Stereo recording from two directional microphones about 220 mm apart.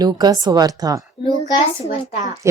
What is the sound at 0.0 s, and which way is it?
Speech, 20° right (ahead or behind).